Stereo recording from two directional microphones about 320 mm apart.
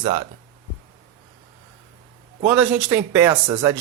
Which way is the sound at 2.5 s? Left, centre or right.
Centre.